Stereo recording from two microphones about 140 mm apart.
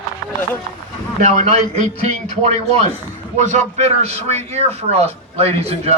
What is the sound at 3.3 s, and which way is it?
A man's voice, 55° right (ahead or behind).